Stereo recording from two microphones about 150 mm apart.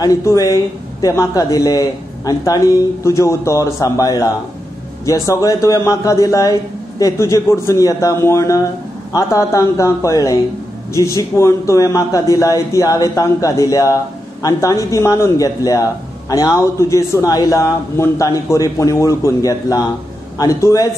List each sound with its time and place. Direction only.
0.0 s a man's voice: 20° left (ahead or behind)